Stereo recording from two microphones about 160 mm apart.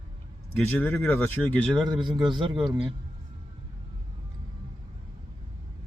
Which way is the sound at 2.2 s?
30° right (ahead or behind).